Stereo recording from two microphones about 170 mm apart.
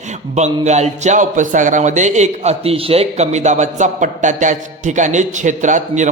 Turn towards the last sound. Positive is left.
turn(degrees=-45)  # may be behind; listen again after turning